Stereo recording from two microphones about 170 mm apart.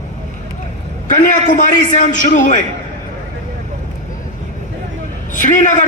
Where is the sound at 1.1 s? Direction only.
50° left (ahead or behind).